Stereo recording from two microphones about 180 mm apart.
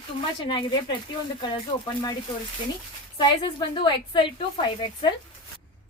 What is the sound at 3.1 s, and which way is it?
A woman's voice, 25° left (ahead or behind).